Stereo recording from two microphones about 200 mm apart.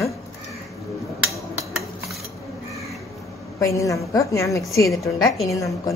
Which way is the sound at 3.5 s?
15° left (ahead or behind).